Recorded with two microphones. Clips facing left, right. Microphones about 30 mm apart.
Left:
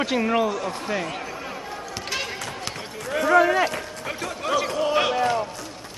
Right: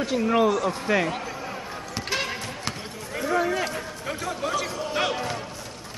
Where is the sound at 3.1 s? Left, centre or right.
Left.